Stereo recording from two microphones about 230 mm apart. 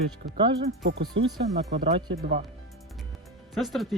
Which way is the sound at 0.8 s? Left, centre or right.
Right.